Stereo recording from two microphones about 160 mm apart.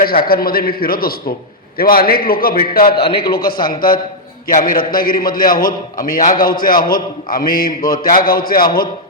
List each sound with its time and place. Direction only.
0.0 s a man's voice: 65° left (ahead or behind)